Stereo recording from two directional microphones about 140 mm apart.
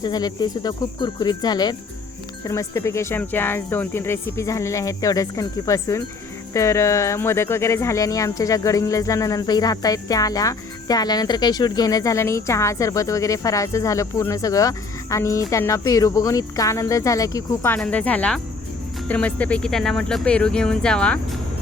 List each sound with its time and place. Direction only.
0.0 s speech: 30° left (ahead or behind)
17.7 s speech: 10° left (ahead or behind)